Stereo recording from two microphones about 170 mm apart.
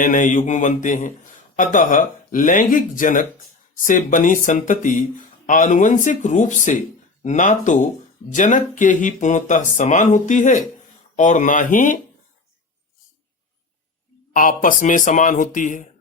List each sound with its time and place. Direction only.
0.0 s a man's voice: 50° left (ahead or behind)
14.3 s a man's voice: 50° left (ahead or behind)